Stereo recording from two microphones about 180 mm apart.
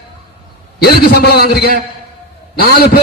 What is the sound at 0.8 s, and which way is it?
A man's voice, 60° left (ahead or behind).